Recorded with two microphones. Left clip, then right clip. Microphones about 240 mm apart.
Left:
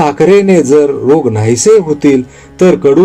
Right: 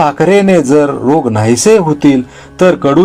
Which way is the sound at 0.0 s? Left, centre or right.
Right.